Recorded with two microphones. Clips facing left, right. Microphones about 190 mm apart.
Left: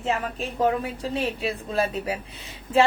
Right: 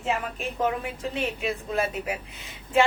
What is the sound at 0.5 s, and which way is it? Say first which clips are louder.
Speech: left 4 dB; 35° left (ahead or behind).